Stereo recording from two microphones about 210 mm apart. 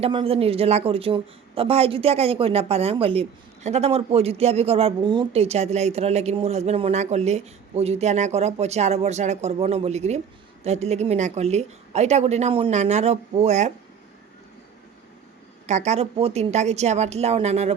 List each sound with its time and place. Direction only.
0.0 s a woman's voice: 25° right (ahead or behind)
15.6 s a woman's voice: 35° right (ahead or behind)